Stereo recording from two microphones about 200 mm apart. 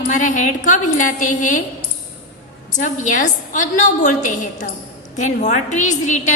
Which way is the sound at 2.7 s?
40° left (ahead or behind).